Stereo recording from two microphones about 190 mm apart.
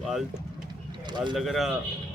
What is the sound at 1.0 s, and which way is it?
Speech, 25° right (ahead or behind).